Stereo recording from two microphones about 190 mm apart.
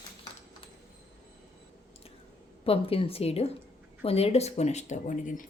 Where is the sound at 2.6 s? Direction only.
30° left (ahead or behind).